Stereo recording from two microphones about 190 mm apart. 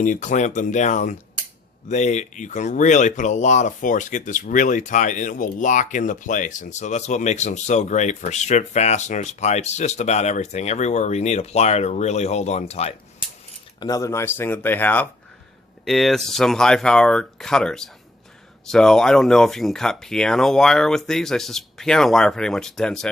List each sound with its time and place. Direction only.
0.0 s speech: 40° left (ahead or behind)
13.7 s speech: 20° left (ahead or behind); by 23.0 s 5° left (ahead or behind)